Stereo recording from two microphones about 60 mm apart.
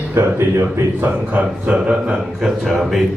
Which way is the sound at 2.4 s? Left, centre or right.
Centre.